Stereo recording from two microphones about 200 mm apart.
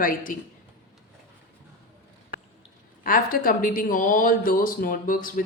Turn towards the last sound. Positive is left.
turn(degrees=45)  # may be behind; listen again after turning